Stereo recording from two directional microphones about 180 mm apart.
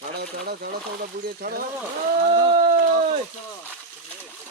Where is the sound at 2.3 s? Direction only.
40° right (ahead or behind).